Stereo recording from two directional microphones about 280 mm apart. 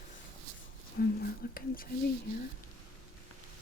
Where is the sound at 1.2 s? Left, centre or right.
Left.